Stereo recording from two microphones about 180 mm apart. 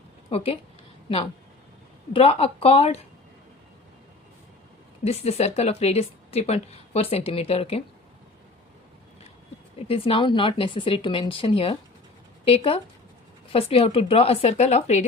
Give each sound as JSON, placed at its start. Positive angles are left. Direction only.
{"t": 0.3, "sound": "a woman's voice", "side_deg": 35}
{"t": 2.1, "sound": "a woman's voice", "side_deg": 30}
{"t": 5.0, "sound": "a woman's voice", "side_deg": 35}
{"t": 9.7, "sound": "a woman's voice", "side_deg": 30}